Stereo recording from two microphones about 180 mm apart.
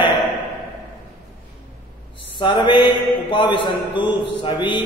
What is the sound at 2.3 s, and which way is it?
A man's voice, 25° left (ahead or behind).